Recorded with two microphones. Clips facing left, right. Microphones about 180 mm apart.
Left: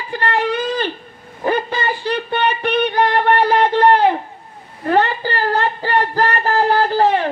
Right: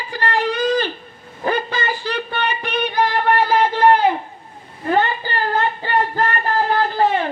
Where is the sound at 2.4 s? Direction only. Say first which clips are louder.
Left 6 dB; 60° left (ahead or behind).